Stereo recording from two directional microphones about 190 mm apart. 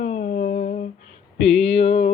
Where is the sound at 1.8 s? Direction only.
35° left (ahead or behind).